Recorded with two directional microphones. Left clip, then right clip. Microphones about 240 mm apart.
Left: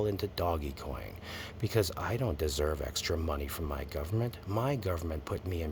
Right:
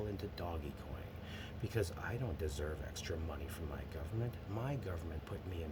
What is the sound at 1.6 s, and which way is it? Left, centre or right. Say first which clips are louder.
Speech: left 9 dB; left.